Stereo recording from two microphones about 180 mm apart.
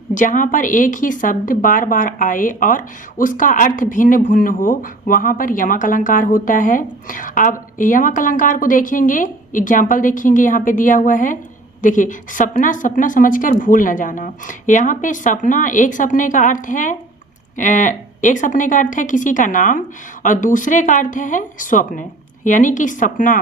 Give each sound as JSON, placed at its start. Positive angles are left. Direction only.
{"t": 0.1, "sound": "speech", "side_deg": 45}